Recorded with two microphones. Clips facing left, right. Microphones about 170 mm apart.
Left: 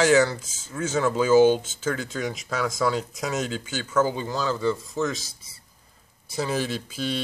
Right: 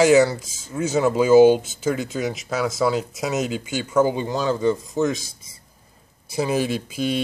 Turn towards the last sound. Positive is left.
turn(degrees=-15)  # may be behind; listen again after turning